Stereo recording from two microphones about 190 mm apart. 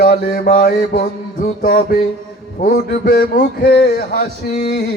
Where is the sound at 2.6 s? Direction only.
55° left (ahead or behind).